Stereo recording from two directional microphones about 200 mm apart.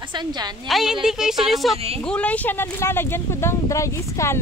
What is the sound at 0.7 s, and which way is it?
Speech, centre (ahead or behind).